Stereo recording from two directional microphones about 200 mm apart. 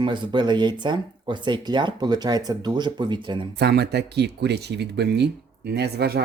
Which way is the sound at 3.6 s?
55° right (ahead or behind).